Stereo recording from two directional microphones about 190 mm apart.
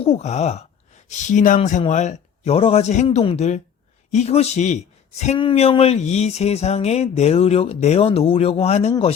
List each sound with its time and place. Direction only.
0.0 s a man's voice: 35° left (ahead or behind)